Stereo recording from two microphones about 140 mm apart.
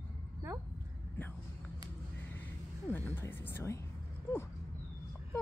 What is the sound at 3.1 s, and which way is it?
Speech, 15° left (ahead or behind).